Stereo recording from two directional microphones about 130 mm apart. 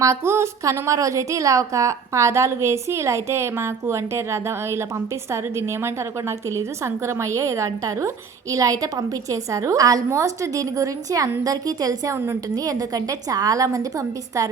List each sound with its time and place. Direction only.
0.0 s a woman's voice: 20° right (ahead or behind)